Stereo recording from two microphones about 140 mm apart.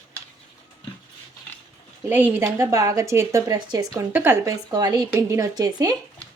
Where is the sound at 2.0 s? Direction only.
15° right (ahead or behind).